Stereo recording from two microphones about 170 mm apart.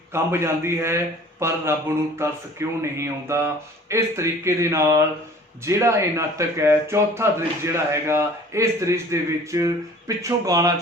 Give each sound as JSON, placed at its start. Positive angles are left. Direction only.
{"t": 0.1, "sound": "speech", "side_deg": -15}